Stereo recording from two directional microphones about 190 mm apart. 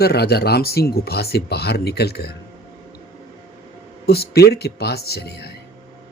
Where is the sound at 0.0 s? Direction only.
55° left (ahead or behind).